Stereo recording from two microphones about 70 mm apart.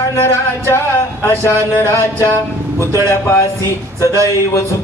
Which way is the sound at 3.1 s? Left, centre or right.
Left.